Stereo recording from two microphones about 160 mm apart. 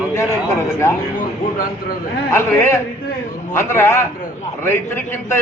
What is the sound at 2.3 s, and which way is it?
A man's voice, 15° left (ahead or behind).